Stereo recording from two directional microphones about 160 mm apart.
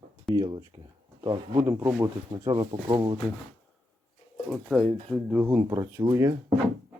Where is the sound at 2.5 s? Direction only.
25° right (ahead or behind).